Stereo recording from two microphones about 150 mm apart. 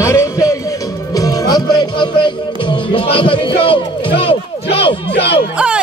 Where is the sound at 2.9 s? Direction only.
35° left (ahead or behind).